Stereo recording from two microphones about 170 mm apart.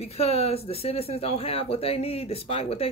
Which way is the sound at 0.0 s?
35° left (ahead or behind).